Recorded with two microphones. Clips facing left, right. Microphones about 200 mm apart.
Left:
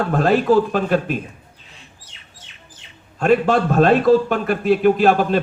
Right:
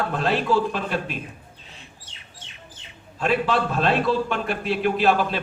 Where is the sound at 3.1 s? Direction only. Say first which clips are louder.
Left 6 dB; 45° left (ahead or behind).